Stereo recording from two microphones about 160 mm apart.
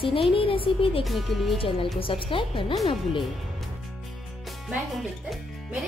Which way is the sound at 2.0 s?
35° left (ahead or behind).